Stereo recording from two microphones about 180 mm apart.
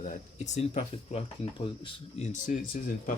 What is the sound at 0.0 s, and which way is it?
Speech, 40° left (ahead or behind).